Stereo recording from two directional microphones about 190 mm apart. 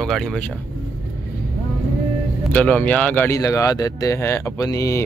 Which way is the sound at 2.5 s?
5° left (ahead or behind).